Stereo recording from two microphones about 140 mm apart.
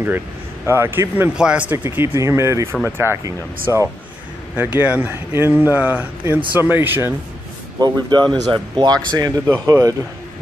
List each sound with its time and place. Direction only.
0.7 s speech: 15° right (ahead or behind)
7.8 s speech: 30° right (ahead or behind)